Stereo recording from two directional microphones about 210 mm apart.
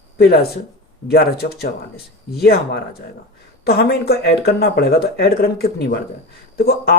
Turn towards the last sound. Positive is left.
turn(degrees=45)  # may be behind; listen again after turning